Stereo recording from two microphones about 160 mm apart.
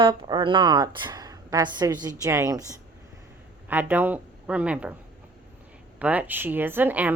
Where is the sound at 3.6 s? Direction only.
10° right (ahead or behind).